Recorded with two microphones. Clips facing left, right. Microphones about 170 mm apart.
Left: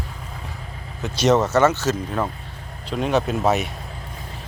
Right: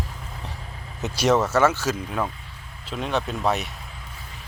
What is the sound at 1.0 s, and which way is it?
Speech, 20° right (ahead or behind).